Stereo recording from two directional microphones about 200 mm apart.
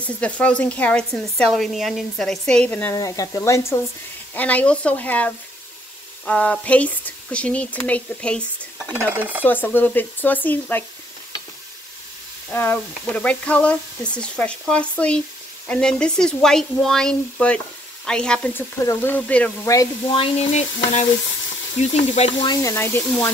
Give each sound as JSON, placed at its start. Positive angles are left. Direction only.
{"t": 0.0, "sound": "speech", "side_deg": 5}
{"t": 9.4, "sound": "speech", "side_deg": 10}
{"t": 12.4, "sound": "speech", "side_deg": 10}
{"t": 20.1, "sound": "stir", "side_deg": 30}
{"t": 22.1, "sound": "stir", "side_deg": 35}
{"t": 22.5, "sound": "speech", "side_deg": 15}